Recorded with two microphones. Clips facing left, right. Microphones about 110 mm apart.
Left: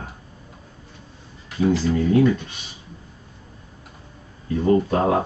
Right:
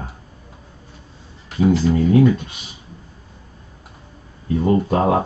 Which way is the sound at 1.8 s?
25° right (ahead or behind).